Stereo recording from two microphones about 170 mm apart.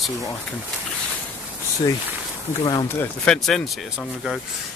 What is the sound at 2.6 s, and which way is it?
Speech, 25° left (ahead or behind).